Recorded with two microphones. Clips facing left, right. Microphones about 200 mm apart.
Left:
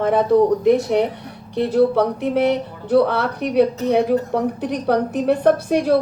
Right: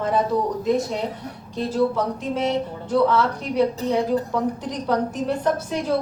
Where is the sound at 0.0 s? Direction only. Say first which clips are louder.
Left 7 dB; 60° left (ahead or behind).